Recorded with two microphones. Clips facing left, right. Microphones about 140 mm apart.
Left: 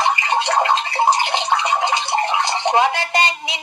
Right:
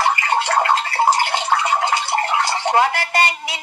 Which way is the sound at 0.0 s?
20° left (ahead or behind).